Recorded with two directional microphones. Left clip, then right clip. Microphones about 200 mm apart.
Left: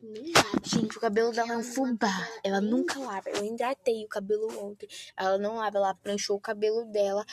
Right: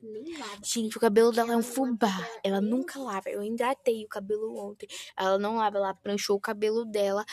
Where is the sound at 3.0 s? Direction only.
25° right (ahead or behind).